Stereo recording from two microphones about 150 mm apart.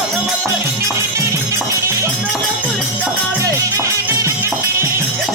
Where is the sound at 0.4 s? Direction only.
20° right (ahead or behind).